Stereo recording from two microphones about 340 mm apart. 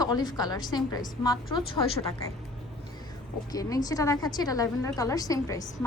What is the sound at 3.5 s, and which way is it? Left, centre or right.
A woman's voice, centre.